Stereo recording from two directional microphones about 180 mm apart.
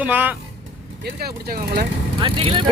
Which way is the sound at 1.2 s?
55° right (ahead or behind).